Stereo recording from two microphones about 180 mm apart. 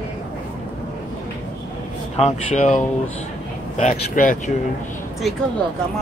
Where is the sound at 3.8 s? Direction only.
45° left (ahead or behind).